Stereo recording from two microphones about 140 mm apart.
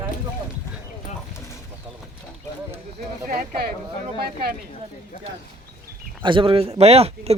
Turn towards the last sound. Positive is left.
turn(degrees=-45)  # may be behind; listen again after turning